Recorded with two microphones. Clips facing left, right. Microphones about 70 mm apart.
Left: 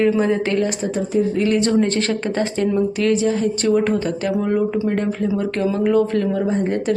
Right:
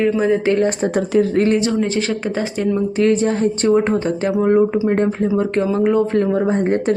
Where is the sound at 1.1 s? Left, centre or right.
Right.